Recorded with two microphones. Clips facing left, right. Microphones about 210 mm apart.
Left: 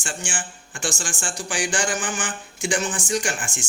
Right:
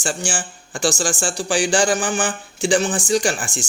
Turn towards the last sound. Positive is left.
turn(degrees=-35)  # may be behind; listen again after turning